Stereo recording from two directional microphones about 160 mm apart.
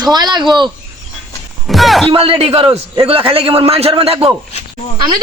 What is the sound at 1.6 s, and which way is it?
Speech, centre (ahead or behind).